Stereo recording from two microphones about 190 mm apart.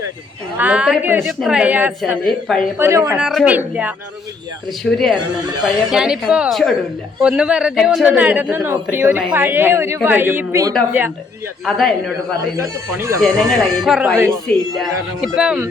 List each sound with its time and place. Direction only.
0.5 s speech: 5° right (ahead or behind)
3.2 s speech: 5° right (ahead or behind)
4.8 s speech: centre (ahead or behind)
12.4 s speech: 15° right (ahead or behind)
13.2 s speech: centre (ahead or behind)